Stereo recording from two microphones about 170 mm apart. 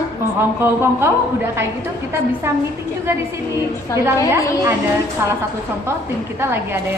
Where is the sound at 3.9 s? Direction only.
15° right (ahead or behind).